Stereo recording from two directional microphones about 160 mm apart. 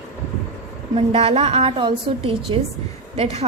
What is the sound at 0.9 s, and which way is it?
A woman's voice, 40° right (ahead or behind).